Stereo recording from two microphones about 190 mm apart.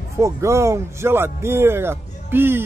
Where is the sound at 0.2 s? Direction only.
15° right (ahead or behind).